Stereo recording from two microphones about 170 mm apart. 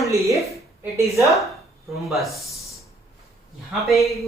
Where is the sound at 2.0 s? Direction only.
Centre (ahead or behind).